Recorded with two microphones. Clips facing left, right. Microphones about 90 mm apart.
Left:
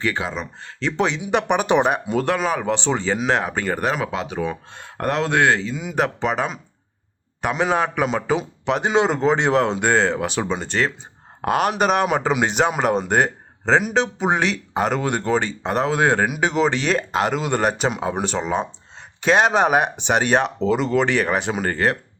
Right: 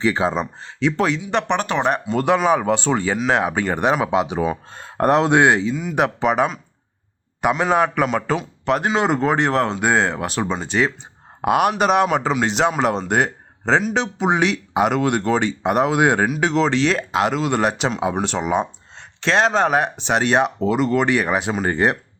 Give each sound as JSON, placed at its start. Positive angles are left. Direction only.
{"t": 0.0, "sound": "speech", "side_deg": -30}
{"t": 0.8, "sound": "speech", "side_deg": -5}
{"t": 2.2, "sound": "speech", "side_deg": -15}
{"t": 7.6, "sound": "speech", "side_deg": 0}
{"t": 8.0, "sound": "speech", "side_deg": 15}
{"t": 8.6, "sound": "speech", "side_deg": 0}
{"t": 16.2, "sound": "speech", "side_deg": 5}
{"t": 19.2, "sound": "speech", "side_deg": 5}